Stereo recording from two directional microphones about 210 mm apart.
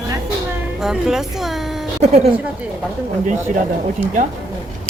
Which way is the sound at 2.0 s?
35° right (ahead or behind).